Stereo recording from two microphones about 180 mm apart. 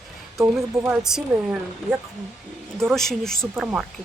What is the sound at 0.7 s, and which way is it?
Speech, 15° right (ahead or behind).